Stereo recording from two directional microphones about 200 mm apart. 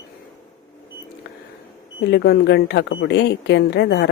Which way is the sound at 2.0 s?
60° left (ahead or behind).